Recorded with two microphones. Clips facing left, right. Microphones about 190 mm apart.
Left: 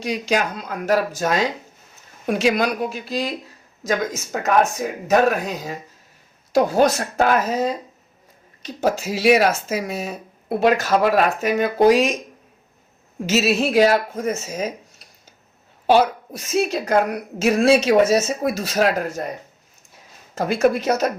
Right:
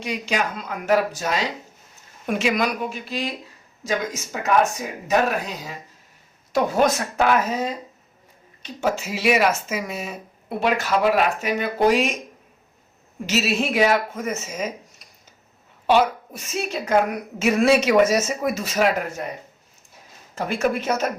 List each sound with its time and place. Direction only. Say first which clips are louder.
0.0 s speech: left 3 dB; 40° left (ahead or behind)
2.2 s speech: left 3 dB; 35° left (ahead or behind)
6.5 s speech: left 3 dB; 35° left (ahead or behind)
13.2 s speech: left 4 dB; 45° left (ahead or behind)
20.3 s speech: left 5 dB; 40° left (ahead or behind)